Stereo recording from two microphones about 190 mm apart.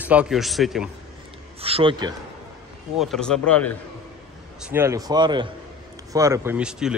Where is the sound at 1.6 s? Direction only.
30° right (ahead or behind).